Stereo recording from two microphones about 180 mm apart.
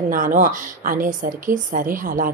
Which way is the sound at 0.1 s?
50° right (ahead or behind).